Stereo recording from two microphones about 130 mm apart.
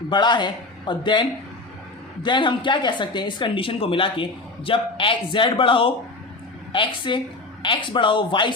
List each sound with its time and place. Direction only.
0.1 s speech: 35° left (ahead or behind)